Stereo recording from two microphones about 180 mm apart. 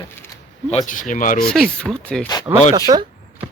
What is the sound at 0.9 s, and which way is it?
Speech, 45° left (ahead or behind).